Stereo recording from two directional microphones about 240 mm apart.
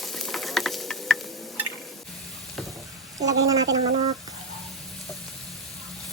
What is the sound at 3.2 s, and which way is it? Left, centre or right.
Speech, centre.